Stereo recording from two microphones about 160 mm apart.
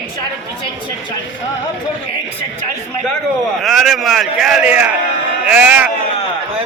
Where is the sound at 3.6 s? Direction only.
Centre (ahead or behind).